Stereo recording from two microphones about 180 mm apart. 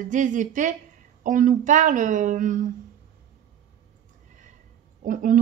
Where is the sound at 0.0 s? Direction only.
45° right (ahead or behind).